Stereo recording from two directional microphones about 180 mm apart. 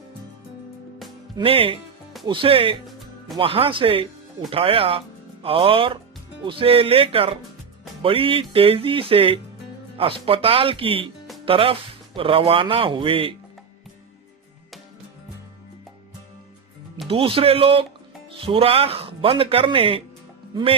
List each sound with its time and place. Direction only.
1.4 s speech: 30° right (ahead or behind)
17.1 s speech: 30° right (ahead or behind)